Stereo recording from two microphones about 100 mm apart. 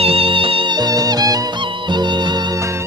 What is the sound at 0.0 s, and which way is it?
Music, 70° right (ahead or behind).